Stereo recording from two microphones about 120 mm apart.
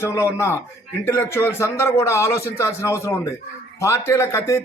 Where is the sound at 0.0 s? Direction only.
25° left (ahead or behind).